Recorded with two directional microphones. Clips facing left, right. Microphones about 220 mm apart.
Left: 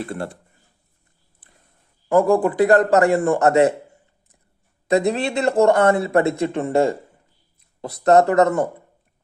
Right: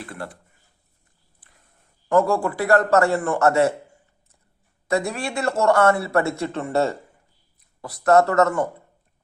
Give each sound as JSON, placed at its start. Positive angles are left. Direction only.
{"t": 0.0, "sound": "speech", "side_deg": 25}
{"t": 2.1, "sound": "a man's voice", "side_deg": 15}
{"t": 4.9, "sound": "speech", "side_deg": 20}